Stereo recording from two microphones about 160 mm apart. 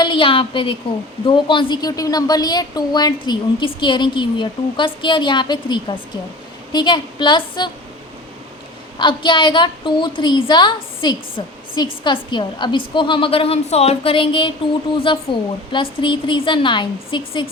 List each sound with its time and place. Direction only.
0.0 s a woman's voice: 30° left (ahead or behind)
9.0 s a woman's voice: 30° left (ahead or behind)